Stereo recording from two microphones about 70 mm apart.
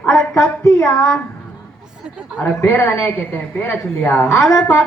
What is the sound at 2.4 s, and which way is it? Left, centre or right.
A woman's voice, left.